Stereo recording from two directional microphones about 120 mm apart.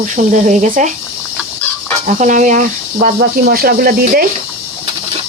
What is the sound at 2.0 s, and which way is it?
Speech, 90° right.